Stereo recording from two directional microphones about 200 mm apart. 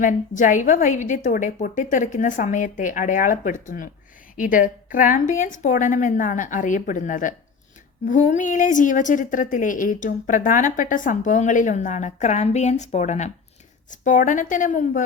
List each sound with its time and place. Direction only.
0.0 s a woman's voice: 40° left (ahead or behind)